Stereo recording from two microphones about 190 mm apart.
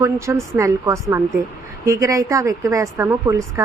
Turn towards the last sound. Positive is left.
turn(degrees=-15)  # may be behind; listen again after turning